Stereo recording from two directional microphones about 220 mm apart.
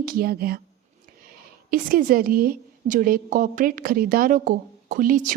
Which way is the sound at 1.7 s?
40° right (ahead or behind).